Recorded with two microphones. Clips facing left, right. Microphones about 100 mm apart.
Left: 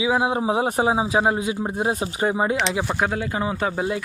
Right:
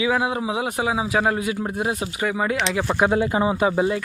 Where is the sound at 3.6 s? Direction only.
Centre (ahead or behind).